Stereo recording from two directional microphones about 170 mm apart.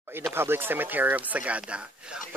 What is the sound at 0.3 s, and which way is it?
Speech, 15° right (ahead or behind).